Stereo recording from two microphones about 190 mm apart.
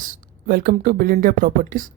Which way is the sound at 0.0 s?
50° right (ahead or behind).